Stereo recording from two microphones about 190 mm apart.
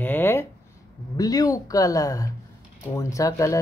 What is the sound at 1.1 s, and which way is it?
Speech, 20° left (ahead or behind).